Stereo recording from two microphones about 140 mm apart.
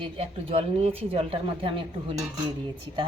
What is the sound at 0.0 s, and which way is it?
Speech, 40° right (ahead or behind).